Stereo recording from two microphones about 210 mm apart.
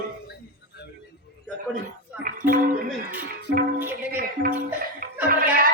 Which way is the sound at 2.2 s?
40° right (ahead or behind).